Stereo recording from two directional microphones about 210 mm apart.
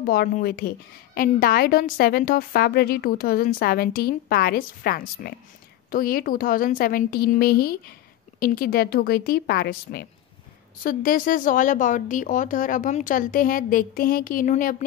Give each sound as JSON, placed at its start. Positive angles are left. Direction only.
{"t": 0.0, "sound": "a woman's voice", "side_deg": 45}